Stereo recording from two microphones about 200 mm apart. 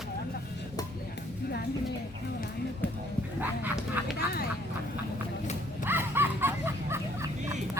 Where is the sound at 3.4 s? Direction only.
10° right (ahead or behind).